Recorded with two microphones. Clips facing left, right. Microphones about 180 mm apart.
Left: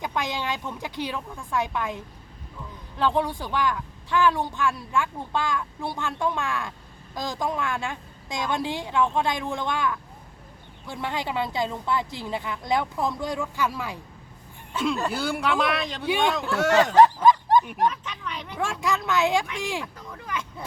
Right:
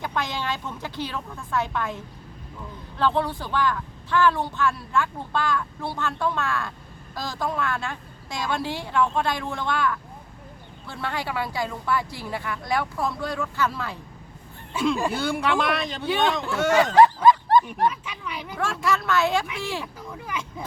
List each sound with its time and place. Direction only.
0.0 s speech: 15° left (ahead or behind)
3.0 s a woman's voice: 15° left (ahead or behind)
14.7 s speech: 10° right (ahead or behind)
15.1 s speech: centre (ahead or behind)
16.0 s speech: 10° left (ahead or behind)
16.7 s speech: 10° right (ahead or behind)
17.2 s dog: 10° left (ahead or behind)
17.8 s speech: 10° right (ahead or behind)
18.5 s speech: 15° left (ahead or behind)
19.8 s speech: 10° right (ahead or behind)